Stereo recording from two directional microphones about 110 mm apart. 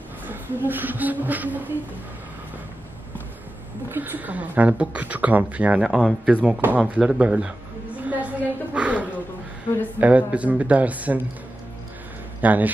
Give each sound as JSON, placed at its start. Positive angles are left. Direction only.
{"t": 0.3, "sound": "speech", "side_deg": -20}
{"t": 3.9, "sound": "speech", "side_deg": -15}
{"t": 8.0, "sound": "a sound", "side_deg": -15}
{"t": 9.9, "sound": "speech", "side_deg": -15}
{"t": 12.4, "sound": "speech", "side_deg": -15}